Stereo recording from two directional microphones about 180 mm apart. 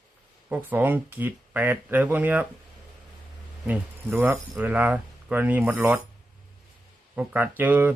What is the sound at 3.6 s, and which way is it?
Speech, 10° right (ahead or behind).